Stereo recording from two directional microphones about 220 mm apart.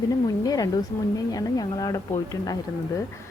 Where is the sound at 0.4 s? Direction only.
15° left (ahead or behind).